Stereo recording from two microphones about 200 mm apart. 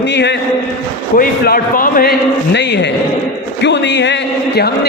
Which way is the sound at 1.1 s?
45° left (ahead or behind).